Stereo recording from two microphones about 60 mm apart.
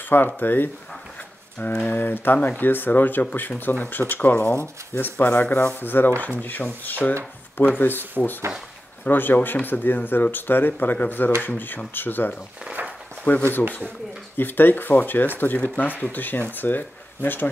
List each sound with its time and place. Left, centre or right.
0.4 s speech: left
1.6 s speech: centre
1.9 s speech: left
12.7 s a sound: right
13.2 s speech: left